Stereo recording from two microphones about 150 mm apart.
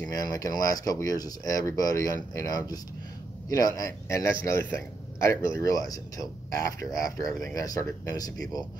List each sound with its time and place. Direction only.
0.0 s speech: 25° left (ahead or behind)